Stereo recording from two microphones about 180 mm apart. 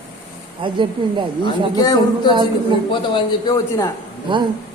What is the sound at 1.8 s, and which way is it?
Speech, 20° left (ahead or behind).